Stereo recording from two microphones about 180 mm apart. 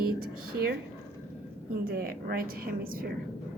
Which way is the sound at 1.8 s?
55° right (ahead or behind).